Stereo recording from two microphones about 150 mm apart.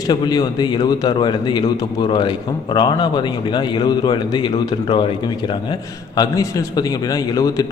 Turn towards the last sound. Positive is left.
turn(degrees=25)  # may be behind; listen again after turning